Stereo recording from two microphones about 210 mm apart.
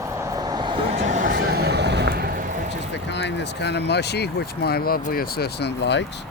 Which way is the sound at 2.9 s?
55° left (ahead or behind).